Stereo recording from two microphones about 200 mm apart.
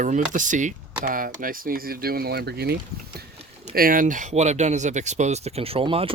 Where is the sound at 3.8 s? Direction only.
45° right (ahead or behind).